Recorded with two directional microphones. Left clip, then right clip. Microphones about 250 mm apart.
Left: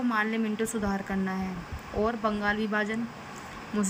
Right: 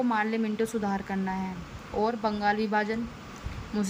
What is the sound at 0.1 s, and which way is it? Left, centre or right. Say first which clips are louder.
A woman's voice: even; centre.